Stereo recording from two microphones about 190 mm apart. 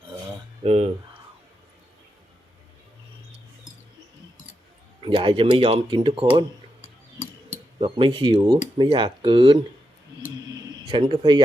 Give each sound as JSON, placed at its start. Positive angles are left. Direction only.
{"t": 0.6, "sound": "speech", "side_deg": -35}
{"t": 4.9, "sound": "speech", "side_deg": -25}
{"t": 7.8, "sound": "speech", "side_deg": -25}
{"t": 10.3, "sound": "a sound", "side_deg": -20}